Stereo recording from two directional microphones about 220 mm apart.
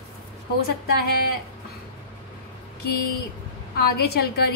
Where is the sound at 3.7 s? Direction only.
45° left (ahead or behind).